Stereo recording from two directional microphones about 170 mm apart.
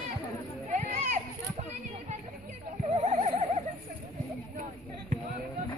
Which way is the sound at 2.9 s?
40° right (ahead or behind).